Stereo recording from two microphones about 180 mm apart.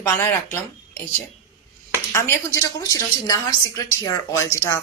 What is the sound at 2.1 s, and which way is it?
A woman's voice, 15° left (ahead or behind).